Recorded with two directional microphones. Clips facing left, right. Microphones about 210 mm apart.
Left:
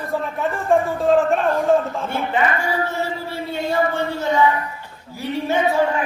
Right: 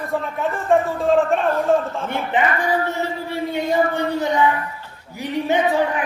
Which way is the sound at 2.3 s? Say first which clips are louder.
Right 2 dB; 20° right (ahead or behind).